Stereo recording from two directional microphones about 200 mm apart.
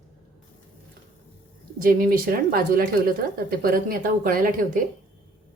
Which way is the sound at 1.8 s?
45° right (ahead or behind).